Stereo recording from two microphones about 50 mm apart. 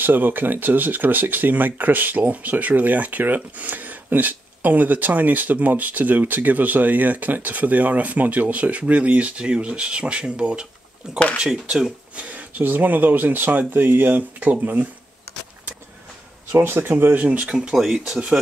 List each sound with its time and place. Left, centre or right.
0.0 s speech: right; by 11.9 s centre
12.2 s speech: right
16.5 s speech: right
17.7 s speech: centre